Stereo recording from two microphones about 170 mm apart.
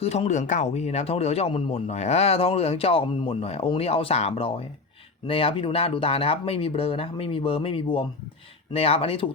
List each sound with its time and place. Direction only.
0.0 s speech: 40° left (ahead or behind)